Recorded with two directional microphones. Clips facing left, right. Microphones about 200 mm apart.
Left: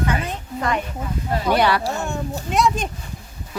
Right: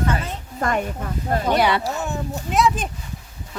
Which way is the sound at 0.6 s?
45° right (ahead or behind).